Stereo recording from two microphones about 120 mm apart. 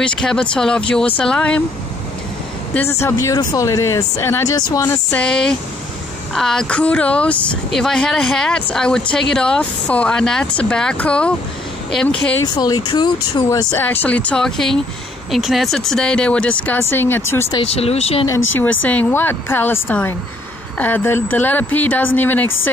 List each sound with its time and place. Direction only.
0.0 s speech: 5° left (ahead or behind)
2.9 s speech: 25° left (ahead or behind)
5.1 s speech: 5° left (ahead or behind)
12.5 s speech: 35° left (ahead or behind)
13.7 s speech: 10° left (ahead or behind)
17.7 s speech: 60° left (ahead or behind)
18.2 s speech: 20° left (ahead or behind)